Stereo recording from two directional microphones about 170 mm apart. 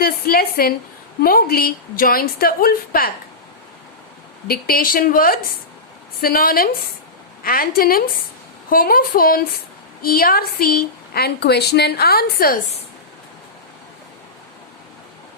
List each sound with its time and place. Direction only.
0.0 s a woman's voice: 60° left (ahead or behind)
4.4 s a woman's voice: 60° left (ahead or behind)